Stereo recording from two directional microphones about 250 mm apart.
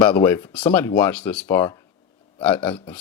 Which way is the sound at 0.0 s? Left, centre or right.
Centre.